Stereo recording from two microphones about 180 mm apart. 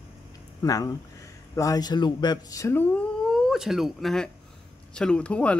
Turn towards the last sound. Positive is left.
turn(degrees=5)  # may be behind; listen again after turning